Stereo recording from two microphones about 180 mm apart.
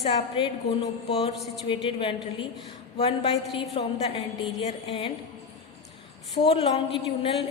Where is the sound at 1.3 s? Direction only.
Centre (ahead or behind).